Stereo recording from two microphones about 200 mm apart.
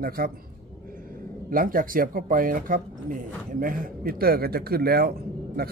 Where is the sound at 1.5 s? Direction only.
45° right (ahead or behind).